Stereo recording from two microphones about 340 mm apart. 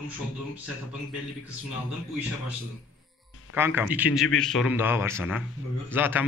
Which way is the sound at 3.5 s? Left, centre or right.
Centre.